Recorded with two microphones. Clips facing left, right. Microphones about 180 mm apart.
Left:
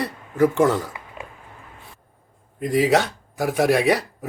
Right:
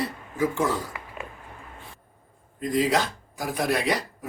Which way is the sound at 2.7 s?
75° left (ahead or behind).